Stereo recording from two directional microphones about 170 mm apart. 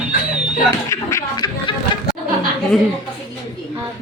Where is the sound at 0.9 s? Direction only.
20° left (ahead or behind).